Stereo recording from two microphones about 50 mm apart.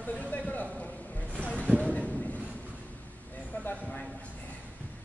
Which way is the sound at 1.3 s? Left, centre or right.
Right.